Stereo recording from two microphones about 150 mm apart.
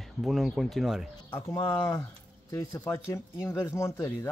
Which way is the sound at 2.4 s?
15° left (ahead or behind).